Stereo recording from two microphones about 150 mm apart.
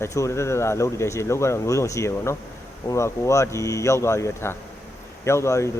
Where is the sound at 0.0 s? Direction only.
20° left (ahead or behind).